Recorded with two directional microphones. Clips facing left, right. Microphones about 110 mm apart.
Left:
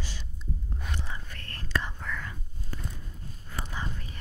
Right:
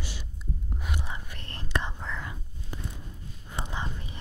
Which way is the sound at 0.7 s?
10° right (ahead or behind).